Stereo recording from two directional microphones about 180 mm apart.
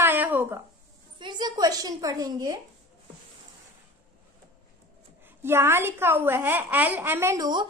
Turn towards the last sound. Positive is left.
turn(degrees=-20)  # may be behind; listen again after turning